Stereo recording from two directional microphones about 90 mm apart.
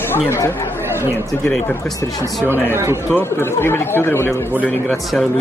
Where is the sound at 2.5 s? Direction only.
30° right (ahead or behind).